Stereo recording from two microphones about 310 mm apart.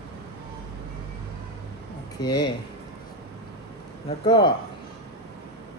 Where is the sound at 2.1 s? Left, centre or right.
Centre.